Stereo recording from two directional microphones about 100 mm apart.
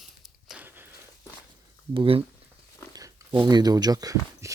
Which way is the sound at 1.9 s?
65° right (ahead or behind).